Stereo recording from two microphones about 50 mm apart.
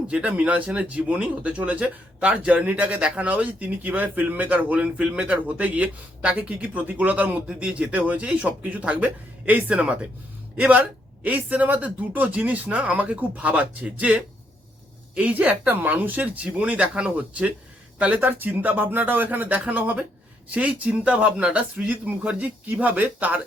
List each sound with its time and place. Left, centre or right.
0.1 s speech: right
7.4 s speech: right
9.8 s speech: centre
10.6 s speech: right
15.7 s speech: right
18.2 s speech: right
21.8 s speech: right